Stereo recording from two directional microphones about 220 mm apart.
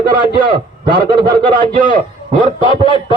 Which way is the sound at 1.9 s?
35° right (ahead or behind).